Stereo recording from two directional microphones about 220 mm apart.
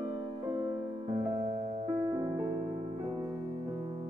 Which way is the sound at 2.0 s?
15° right (ahead or behind).